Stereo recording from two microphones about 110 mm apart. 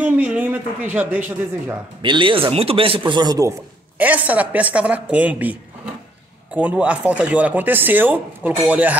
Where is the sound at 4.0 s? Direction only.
15° right (ahead or behind).